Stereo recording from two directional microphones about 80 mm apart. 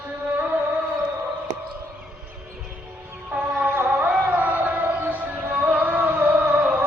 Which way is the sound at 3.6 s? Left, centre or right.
Right.